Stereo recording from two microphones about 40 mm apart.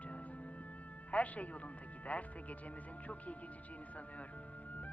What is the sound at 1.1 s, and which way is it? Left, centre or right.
Speech, left.